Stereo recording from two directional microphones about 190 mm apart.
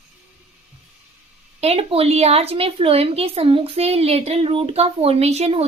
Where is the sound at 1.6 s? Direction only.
30° right (ahead or behind).